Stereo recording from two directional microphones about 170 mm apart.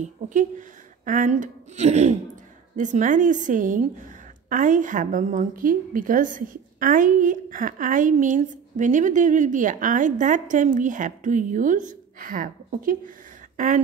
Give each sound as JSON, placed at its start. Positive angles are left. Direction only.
{"t": 0.0, "sound": "a woman's voice", "side_deg": -45}